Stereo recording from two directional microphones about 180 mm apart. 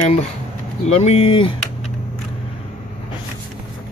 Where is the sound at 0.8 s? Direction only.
35° left (ahead or behind).